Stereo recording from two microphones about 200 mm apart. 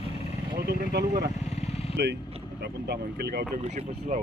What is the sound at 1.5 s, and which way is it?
Vehicle, 30° left (ahead or behind).